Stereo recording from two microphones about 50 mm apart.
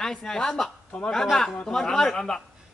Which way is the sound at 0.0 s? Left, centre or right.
Centre.